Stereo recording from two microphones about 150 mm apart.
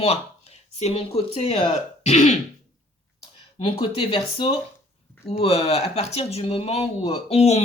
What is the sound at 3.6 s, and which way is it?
Speech, 40° left (ahead or behind).